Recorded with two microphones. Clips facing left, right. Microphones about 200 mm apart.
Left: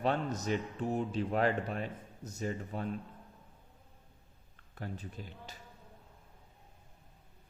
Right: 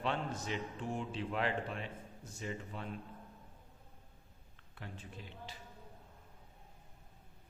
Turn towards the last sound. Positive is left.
turn(degrees=40)  # may be behind; listen again after turning